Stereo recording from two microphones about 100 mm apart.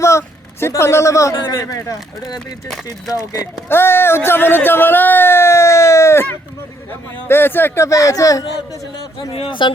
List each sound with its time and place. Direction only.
0.0 s a sound: 30° left (ahead or behind)
1.6 s a man's voice: 35° left (ahead or behind)
3.7 s a man's voice: 25° left (ahead or behind)
7.3 s a man's voice: 20° left (ahead or behind)
9.3 s speech: 60° left (ahead or behind)